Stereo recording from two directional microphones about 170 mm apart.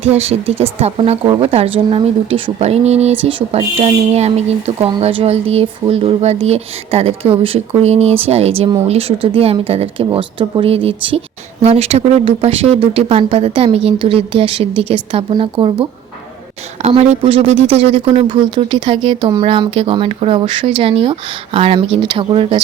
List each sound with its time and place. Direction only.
0.0 s speech: 40° right (ahead or behind)